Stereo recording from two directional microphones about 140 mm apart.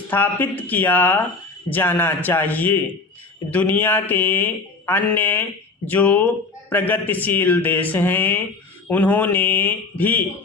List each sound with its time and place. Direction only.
0.1 s mantra: 15° left (ahead or behind)